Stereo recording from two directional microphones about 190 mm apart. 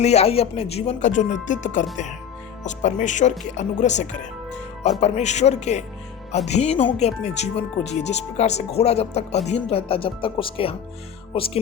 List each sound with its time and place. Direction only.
0.0 s speech: 35° left (ahead or behind)